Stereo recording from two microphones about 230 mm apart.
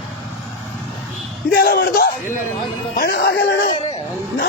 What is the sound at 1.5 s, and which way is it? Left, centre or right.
Speech, left.